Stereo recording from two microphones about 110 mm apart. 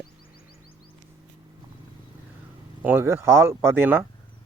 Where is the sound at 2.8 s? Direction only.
20° right (ahead or behind).